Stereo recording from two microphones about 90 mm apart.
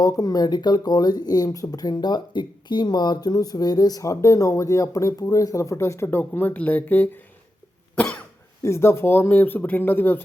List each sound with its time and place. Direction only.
0.0 s speech: 40° left (ahead or behind); by 7.2 s 20° left (ahead or behind)
7.9 s cough: 15° left (ahead or behind)
8.6 s speech: 30° left (ahead or behind)